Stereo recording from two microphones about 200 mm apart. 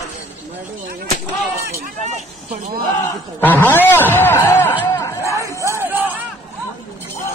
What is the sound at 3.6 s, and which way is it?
Speech, 10° left (ahead or behind).